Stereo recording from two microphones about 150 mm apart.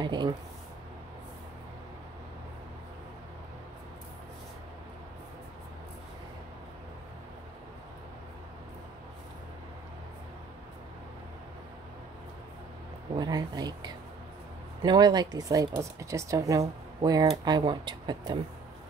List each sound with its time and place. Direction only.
0.0 s speech: 30° right (ahead or behind)
13.1 s speech: 25° right (ahead or behind)